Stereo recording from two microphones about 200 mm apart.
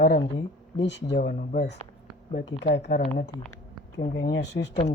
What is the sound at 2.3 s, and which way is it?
A child's voice, 60° left (ahead or behind).